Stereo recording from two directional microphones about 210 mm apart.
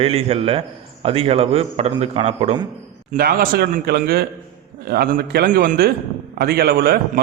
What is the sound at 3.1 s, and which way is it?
A man's voice, 45° right (ahead or behind).